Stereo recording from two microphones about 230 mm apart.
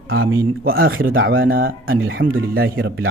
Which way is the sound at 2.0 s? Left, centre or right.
Right.